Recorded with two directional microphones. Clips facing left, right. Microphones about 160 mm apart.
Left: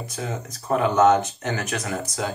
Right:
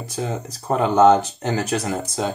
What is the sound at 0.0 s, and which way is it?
Speech, 30° right (ahead or behind).